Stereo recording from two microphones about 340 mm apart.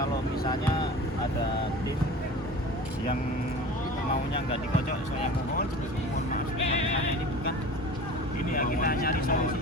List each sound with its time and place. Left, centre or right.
6.3 s music: centre
8.5 s speech: left